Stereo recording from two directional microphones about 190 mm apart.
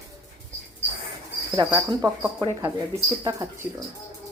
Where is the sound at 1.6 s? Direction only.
20° right (ahead or behind).